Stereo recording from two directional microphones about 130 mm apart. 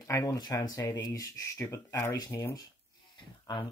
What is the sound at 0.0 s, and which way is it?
Speech, 25° left (ahead or behind).